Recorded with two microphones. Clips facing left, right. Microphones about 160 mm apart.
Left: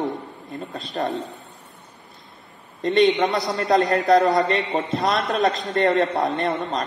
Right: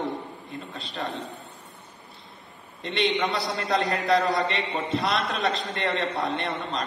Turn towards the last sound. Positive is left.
turn(degrees=40)  # may be behind; listen again after turning